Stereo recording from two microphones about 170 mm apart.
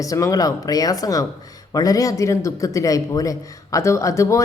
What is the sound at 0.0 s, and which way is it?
A man's voice, 20° left (ahead or behind).